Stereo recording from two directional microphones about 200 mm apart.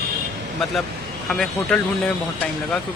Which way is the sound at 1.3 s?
5° left (ahead or behind).